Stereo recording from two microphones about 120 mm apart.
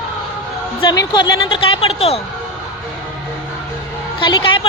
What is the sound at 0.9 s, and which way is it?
A woman's voice, 35° left (ahead or behind).